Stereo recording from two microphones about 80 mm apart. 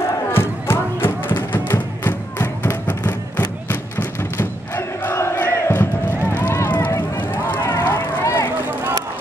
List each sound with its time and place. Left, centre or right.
0.3 s music: left
4.4 s crowd: left
6.3 s run: left